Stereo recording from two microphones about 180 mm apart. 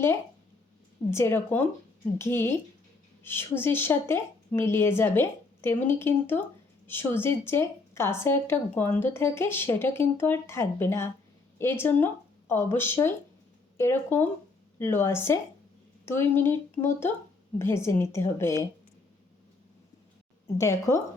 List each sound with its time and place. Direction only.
1.1 s a woman's voice: 15° left (ahead or behind)
20.6 s a woman's voice: 15° left (ahead or behind)